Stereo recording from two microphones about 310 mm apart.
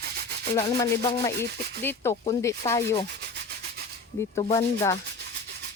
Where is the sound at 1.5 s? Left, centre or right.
Right.